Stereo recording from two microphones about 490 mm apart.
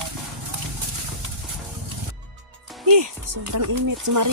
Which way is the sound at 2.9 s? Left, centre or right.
Right.